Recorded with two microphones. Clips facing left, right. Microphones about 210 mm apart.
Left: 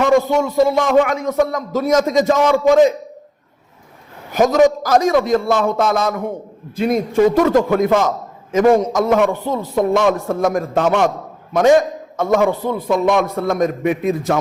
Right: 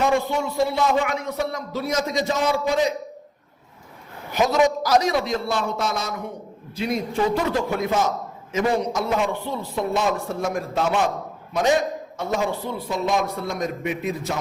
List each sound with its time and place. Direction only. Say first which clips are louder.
0.1 s a man's voice: left 8 dB; 40° left (ahead or behind)
2.3 s a man's voice: left 9 dB; 90° left
4.3 s a man's voice: left 7 dB; 45° left (ahead or behind)
9.3 s a man's voice: left 8 dB; 45° left (ahead or behind)
9.9 s a man's voice: left 7 dB; 75° left (ahead or behind)
10.2 s a man's voice: left 8 dB; 45° left (ahead or behind)